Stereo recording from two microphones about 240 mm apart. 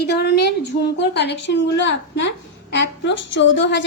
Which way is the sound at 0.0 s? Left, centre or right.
Left.